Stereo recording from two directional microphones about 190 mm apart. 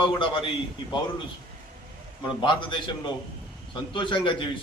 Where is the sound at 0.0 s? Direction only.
25° left (ahead or behind).